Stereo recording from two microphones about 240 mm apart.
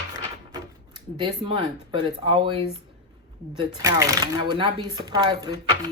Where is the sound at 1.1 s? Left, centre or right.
Centre.